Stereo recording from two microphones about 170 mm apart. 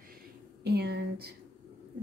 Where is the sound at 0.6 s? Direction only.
75° right (ahead or behind).